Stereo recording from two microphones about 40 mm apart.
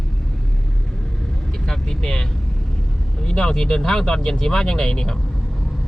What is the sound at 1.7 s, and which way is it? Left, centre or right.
Speech, centre.